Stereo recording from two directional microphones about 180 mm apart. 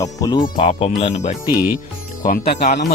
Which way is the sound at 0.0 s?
20° left (ahead or behind).